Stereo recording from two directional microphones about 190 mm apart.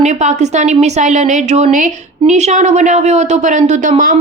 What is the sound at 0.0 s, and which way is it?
A woman's voice, 40° right (ahead or behind).